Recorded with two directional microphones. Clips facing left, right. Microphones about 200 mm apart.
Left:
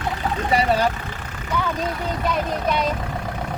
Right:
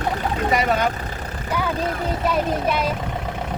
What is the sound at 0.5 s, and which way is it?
Speech, 30° left (ahead or behind).